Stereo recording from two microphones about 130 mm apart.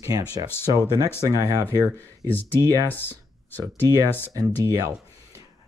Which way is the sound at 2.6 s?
30° right (ahead or behind).